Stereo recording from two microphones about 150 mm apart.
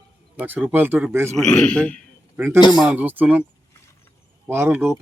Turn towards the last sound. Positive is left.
turn(degrees=-15)  # may be behind; listen again after turning